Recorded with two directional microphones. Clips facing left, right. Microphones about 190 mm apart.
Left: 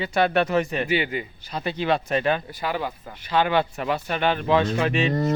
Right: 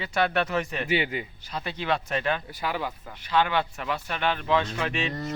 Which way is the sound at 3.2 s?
40° left (ahead or behind).